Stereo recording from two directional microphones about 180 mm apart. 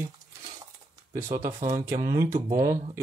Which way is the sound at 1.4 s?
40° right (ahead or behind).